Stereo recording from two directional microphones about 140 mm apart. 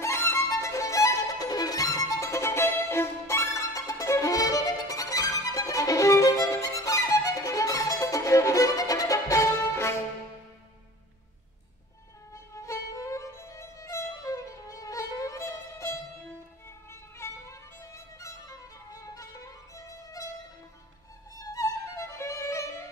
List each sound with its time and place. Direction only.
0.0 s violin: 20° left (ahead or behind)
12.5 s violin: 20° left (ahead or behind)
16.9 s music: 20° left (ahead or behind)
21.4 s violin: 25° left (ahead or behind)